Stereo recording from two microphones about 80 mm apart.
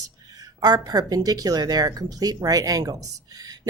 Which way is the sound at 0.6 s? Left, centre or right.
Right.